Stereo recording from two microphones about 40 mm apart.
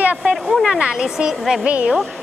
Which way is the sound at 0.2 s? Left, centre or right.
Centre.